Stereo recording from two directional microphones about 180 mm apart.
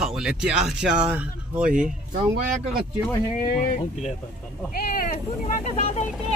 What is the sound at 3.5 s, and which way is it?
Speech, 50° left (ahead or behind).